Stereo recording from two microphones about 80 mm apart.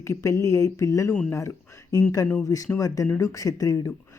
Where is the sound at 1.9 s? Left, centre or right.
Left.